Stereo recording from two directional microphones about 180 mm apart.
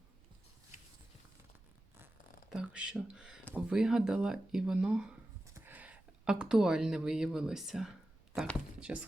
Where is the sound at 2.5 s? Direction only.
5° right (ahead or behind).